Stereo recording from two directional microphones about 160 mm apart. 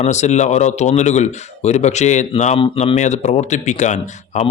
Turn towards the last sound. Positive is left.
turn(degrees=45)  # may be behind; listen again after turning